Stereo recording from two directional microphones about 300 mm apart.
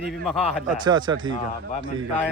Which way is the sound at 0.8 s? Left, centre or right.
Centre.